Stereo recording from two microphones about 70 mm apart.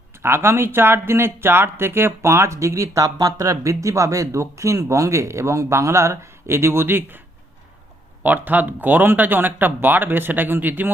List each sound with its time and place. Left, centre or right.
0.2 s speech: right
8.2 s speech: right